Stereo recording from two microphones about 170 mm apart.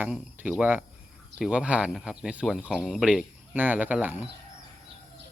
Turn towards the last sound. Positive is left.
turn(degrees=-10)  # may be behind; listen again after turning